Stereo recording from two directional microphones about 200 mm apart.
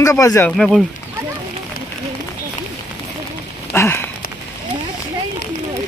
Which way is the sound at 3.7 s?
10° left (ahead or behind).